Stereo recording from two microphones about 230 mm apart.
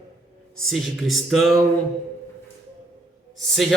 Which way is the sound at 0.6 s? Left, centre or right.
Centre.